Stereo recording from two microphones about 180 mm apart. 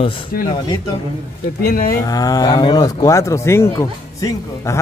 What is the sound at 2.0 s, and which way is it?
Speech, 20° left (ahead or behind).